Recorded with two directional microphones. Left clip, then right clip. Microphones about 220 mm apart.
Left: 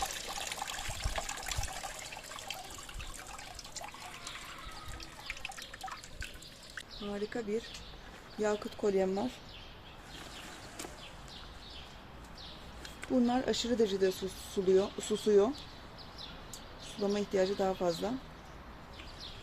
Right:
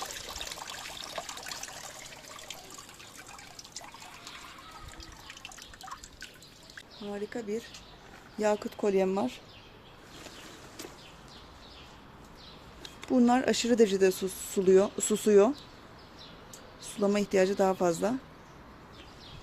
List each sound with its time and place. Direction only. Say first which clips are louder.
0.0 s water: left 1 dB; 5° right (ahead or behind)
7.1 s speech: right 1 dB; 5° right (ahead or behind)
8.4 s speech: right 4 dB; 25° right (ahead or behind)
13.1 s speech: right 6 dB; 30° right (ahead or behind)
17.0 s speech: right 5 dB; 30° right (ahead or behind)